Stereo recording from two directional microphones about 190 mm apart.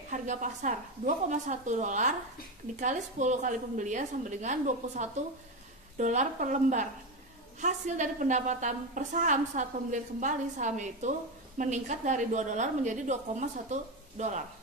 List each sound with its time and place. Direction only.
0.1 s a woman's voice: 40° right (ahead or behind)